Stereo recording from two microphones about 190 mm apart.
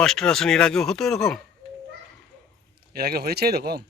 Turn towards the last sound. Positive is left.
turn(degrees=-55)  # may be behind; listen again after turning